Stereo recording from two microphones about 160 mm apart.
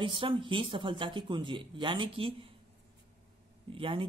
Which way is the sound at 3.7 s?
35° right (ahead or behind).